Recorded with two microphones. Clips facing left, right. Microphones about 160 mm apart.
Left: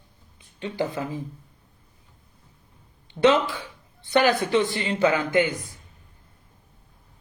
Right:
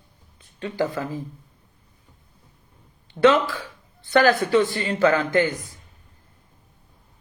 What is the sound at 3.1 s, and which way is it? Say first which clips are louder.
A man's voice: right 2 dB; 20° left (ahead or behind).